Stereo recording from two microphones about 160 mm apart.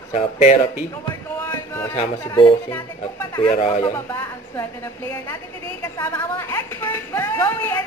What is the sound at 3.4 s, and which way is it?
Speech, 45° left (ahead or behind).